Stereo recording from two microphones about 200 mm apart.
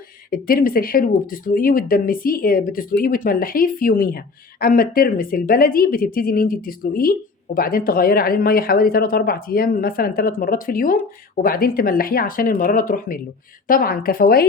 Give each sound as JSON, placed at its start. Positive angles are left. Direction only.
{"t": 0.3, "sound": "speech", "side_deg": 45}